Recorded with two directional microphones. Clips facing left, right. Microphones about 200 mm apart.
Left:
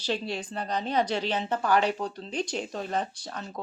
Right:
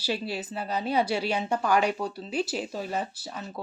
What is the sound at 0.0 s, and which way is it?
A woman's voice, 5° right (ahead or behind).